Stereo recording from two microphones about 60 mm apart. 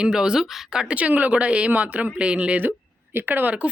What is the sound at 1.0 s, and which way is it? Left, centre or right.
A woman's voice, right.